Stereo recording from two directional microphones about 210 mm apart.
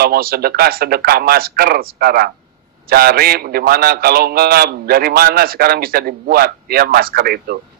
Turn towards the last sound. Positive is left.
turn(degrees=-45)  # may be behind; listen again after turning